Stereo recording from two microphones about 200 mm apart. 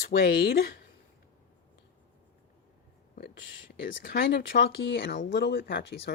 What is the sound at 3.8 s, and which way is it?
Speech, 50° left (ahead or behind).